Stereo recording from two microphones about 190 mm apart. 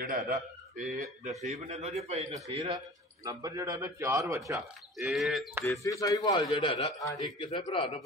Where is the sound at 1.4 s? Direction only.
35° right (ahead or behind).